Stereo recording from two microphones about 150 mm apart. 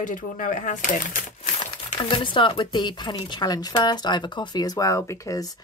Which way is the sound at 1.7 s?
30° left (ahead or behind).